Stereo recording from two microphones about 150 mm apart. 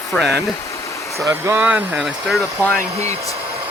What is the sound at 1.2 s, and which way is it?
Speech, 15° right (ahead or behind).